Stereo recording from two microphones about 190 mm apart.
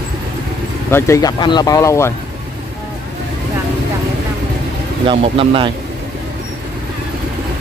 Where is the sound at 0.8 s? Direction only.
15° left (ahead or behind).